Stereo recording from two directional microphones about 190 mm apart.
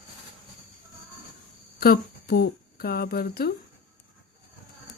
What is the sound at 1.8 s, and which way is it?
A woman's voice, 55° left (ahead or behind).